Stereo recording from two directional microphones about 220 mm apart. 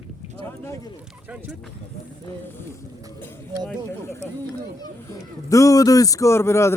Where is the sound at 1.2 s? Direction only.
5° right (ahead or behind).